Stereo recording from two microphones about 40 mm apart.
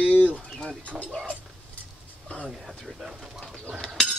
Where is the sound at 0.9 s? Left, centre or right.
Right.